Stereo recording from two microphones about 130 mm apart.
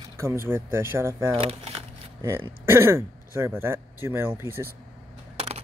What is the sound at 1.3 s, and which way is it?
Speech, 50° right (ahead or behind).